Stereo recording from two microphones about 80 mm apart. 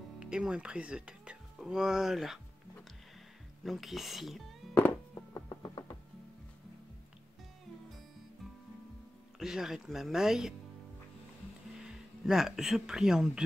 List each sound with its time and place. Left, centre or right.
0.2 s speech: centre
3.6 s speech: centre
5.3 s music: left
9.4 s speech: centre
11.8 s speech: centre